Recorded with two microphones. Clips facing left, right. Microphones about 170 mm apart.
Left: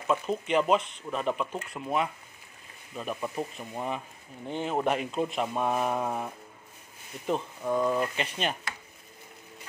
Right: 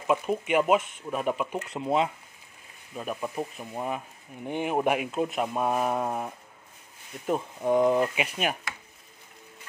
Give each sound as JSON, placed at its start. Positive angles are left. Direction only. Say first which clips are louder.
{"t": 0.0, "sound": "speech", "louder": "right 2 dB", "side_deg": -10}
{"t": 1.7, "sound": "speech", "louder": "right 5 dB", "side_deg": -25}
{"t": 3.0, "sound": "speech", "louder": "right 1 dB", "side_deg": -5}
{"t": 7.6, "sound": "speech", "louder": "right 5 dB", "side_deg": -20}